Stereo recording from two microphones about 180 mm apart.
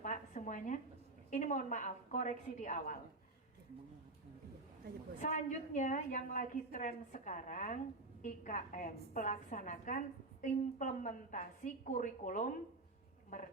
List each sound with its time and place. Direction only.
0.0 s a sound: 45° left (ahead or behind)
1.3 s a woman's voice: 45° left (ahead or behind)
5.2 s a woman's voice: 45° left (ahead or behind)